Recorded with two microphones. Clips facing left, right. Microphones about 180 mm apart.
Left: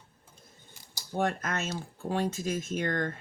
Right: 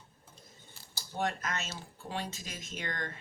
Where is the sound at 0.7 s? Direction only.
15° left (ahead or behind).